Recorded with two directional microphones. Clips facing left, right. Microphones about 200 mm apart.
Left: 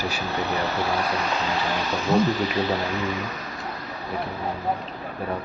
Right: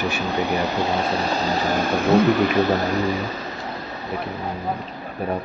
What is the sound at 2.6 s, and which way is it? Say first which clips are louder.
Speech: right 5 dB; 45° right (ahead or behind).